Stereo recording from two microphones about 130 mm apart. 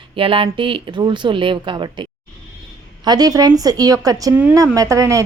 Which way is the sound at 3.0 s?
30° right (ahead or behind).